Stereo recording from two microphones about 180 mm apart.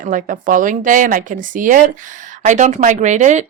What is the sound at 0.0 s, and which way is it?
A woman's voice, 45° right (ahead or behind).